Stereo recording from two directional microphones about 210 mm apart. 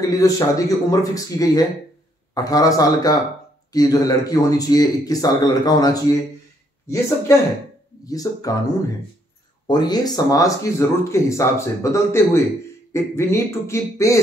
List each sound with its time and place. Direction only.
0.0 s speech: 15° left (ahead or behind)
8.0 s speech: 15° left (ahead or behind)
9.7 s speech: 20° left (ahead or behind)